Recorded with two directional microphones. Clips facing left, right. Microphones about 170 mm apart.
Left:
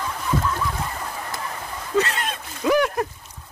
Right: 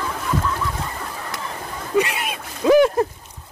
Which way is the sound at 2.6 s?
25° right (ahead or behind).